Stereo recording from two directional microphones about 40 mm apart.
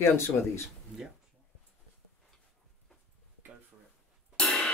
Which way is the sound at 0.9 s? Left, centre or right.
Centre.